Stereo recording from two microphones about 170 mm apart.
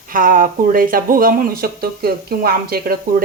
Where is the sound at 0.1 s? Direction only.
55° right (ahead or behind).